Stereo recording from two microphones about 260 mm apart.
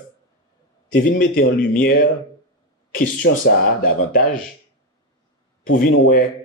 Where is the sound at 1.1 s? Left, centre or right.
Left.